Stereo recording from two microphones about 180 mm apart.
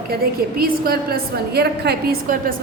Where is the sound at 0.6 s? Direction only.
60° right (ahead or behind).